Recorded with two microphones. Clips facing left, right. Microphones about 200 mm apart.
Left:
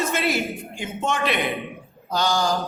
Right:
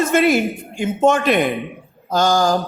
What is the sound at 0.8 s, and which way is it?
A man's voice, 50° right (ahead or behind).